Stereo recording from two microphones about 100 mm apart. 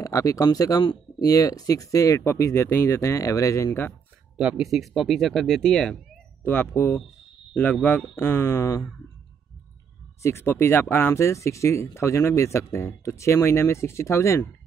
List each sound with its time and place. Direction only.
0.0 s speech: 35° left (ahead or behind)
4.4 s speech: 5° right (ahead or behind)
6.4 s speech: 20° left (ahead or behind)
8.2 s speech: 25° left (ahead or behind)
10.2 s speech: 25° left (ahead or behind)